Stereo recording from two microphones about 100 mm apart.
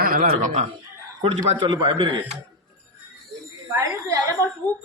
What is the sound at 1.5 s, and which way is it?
Speech, 55° right (ahead or behind).